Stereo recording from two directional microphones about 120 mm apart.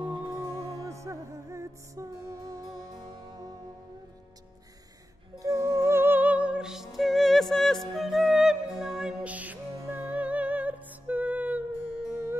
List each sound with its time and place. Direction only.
0.1 s music: 35° right (ahead or behind)
5.4 s music: 25° right (ahead or behind)